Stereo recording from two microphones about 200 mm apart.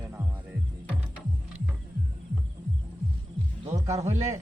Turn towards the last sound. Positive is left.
turn(degrees=-35)  # may be behind; listen again after turning